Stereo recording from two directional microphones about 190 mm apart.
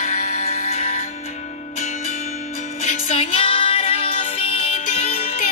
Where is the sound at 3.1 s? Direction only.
30° left (ahead or behind).